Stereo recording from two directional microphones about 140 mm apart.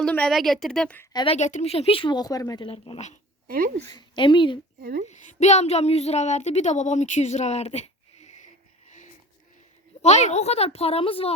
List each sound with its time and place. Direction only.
0.0 s a woman's voice: 5° left (ahead or behind)
1.1 s a woman's voice: 40° left (ahead or behind)
1.4 s speech: 60° left (ahead or behind); by 2.6 s 25° left (ahead or behind)
2.6 s speech: 40° left (ahead or behind)
3.4 s speech: 90° right
3.9 s speech: 35° left (ahead or behind)
4.8 s a woman's voice: 90° right
5.0 s speech: 55° left (ahead or behind)
10.0 s speech: 55° left (ahead or behind)